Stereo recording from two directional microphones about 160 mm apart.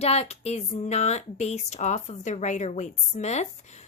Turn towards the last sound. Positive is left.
turn(degrees=45)  # may be behind; listen again after turning